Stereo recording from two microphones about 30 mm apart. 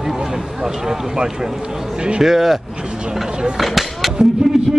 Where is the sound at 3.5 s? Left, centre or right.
Centre.